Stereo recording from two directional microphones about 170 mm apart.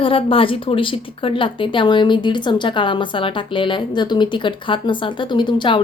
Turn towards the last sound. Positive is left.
turn(degrees=30)  # may be behind; listen again after turning